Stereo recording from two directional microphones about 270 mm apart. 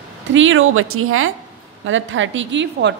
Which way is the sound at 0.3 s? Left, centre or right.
Right.